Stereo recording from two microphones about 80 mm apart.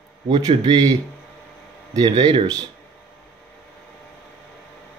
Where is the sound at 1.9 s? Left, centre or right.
Right.